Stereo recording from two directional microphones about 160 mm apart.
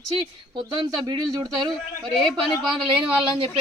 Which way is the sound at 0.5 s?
25° right (ahead or behind).